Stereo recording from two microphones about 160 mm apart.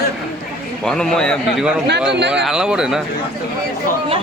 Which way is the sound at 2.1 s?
90° right.